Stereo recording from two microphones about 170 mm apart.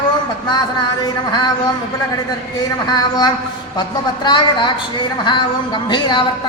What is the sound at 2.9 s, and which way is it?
Speech, 25° left (ahead or behind).